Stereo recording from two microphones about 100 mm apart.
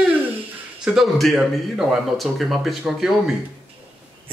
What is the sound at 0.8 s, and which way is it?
Speech, centre (ahead or behind).